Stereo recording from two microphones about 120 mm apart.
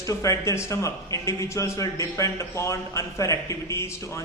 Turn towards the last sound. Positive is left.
turn(degrees=25)  # may be behind; listen again after turning